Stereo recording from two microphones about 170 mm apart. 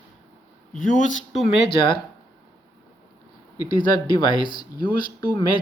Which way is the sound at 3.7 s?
25° left (ahead or behind).